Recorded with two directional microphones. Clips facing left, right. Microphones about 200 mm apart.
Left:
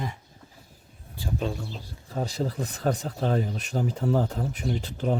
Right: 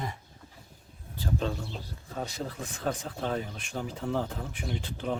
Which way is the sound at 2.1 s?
35° left (ahead or behind).